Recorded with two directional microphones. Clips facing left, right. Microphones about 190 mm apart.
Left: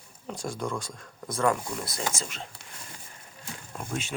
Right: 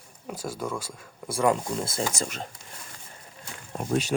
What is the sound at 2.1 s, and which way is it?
Speech, 40° right (ahead or behind).